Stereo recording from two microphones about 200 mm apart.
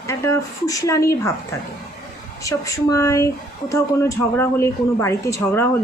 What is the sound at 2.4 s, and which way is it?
A woman's voice, 15° left (ahead or behind).